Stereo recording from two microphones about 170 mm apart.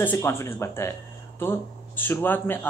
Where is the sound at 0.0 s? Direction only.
15° left (ahead or behind).